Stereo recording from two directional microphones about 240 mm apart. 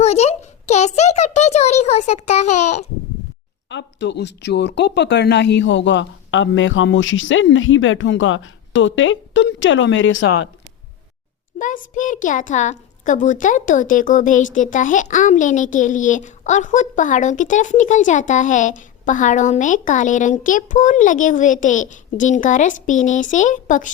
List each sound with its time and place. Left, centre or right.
0.0 s a child's voice: left
3.7 s speech: left
11.6 s a child's voice: left